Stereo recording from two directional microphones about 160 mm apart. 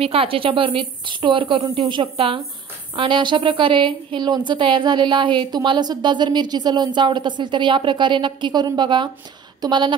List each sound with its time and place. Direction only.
0.0 s speech: 35° right (ahead or behind)